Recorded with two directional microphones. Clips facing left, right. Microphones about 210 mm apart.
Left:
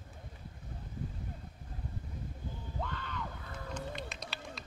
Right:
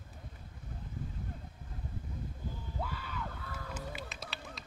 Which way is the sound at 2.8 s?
5° right (ahead or behind).